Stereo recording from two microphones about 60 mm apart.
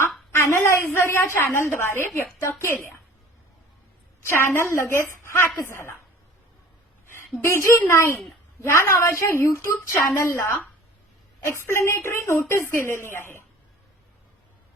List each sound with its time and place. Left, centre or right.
0.3 s a woman's voice: left
4.3 s a woman's voice: left
7.4 s a woman's voice: left